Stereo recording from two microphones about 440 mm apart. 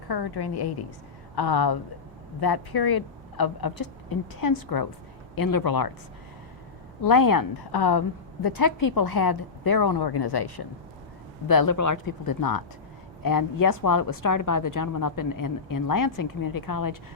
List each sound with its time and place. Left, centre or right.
0.1 s a woman's voice: left
7.0 s a woman's voice: left
11.4 s a woman's voice: left